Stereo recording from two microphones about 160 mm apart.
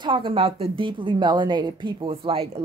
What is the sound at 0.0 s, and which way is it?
A woman's voice, 30° right (ahead or behind).